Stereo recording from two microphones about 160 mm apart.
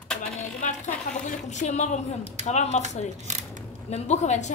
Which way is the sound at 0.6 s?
50° left (ahead or behind).